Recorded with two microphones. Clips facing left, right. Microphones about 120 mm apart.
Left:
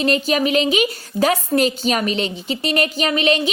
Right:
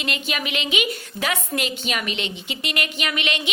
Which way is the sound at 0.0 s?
40° left (ahead or behind).